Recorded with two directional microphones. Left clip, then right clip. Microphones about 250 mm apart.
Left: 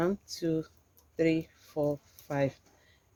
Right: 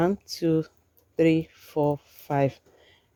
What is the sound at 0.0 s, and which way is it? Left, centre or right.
Speech, right.